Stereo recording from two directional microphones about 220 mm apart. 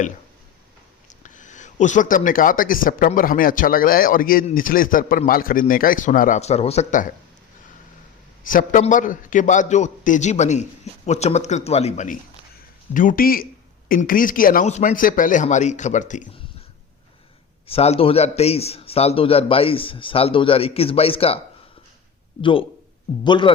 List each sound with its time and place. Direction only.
1.2 s speech: 35° left (ahead or behind)
8.4 s speech: 35° left (ahead or behind)
17.7 s a man's voice: 25° left (ahead or behind)
22.4 s a man's voice: 25° left (ahead or behind)